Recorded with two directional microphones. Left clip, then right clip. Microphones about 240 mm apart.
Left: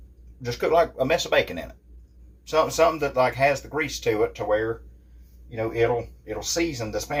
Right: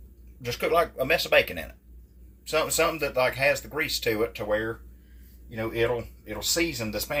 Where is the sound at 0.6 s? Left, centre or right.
Centre.